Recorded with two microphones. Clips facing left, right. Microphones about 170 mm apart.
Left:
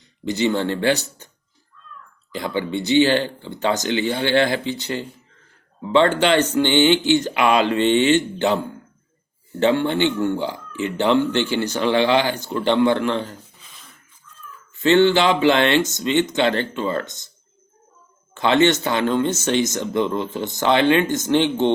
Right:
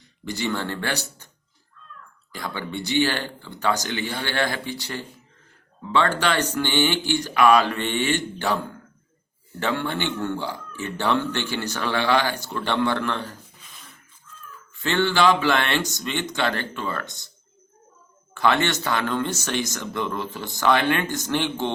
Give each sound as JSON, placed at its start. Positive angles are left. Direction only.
{"t": 0.3, "sound": "speech", "side_deg": 20}
{"t": 2.3, "sound": "speech", "side_deg": 20}
{"t": 14.8, "sound": "speech", "side_deg": 20}
{"t": 18.3, "sound": "speech", "side_deg": 20}